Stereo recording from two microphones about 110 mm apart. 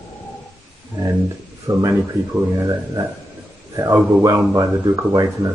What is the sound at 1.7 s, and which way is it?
Speech, 45° right (ahead or behind).